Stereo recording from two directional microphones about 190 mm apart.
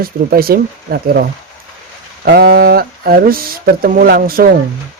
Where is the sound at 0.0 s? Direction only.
50° right (ahead or behind).